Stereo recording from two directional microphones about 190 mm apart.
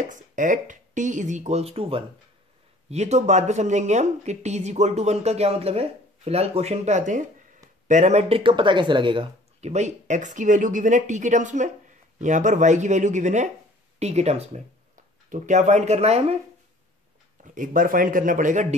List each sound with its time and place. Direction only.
0.0 s speech: 40° right (ahead or behind)
17.4 s speech: 45° right (ahead or behind)